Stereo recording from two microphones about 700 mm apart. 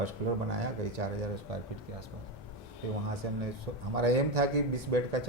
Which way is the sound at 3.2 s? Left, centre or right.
Right.